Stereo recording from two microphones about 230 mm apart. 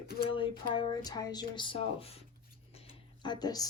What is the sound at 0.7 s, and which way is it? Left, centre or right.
A woman's voice, centre.